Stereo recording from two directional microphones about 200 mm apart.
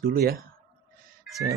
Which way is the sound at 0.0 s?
45° right (ahead or behind).